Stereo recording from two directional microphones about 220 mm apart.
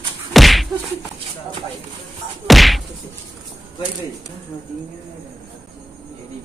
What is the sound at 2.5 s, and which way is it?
Whack, centre (ahead or behind).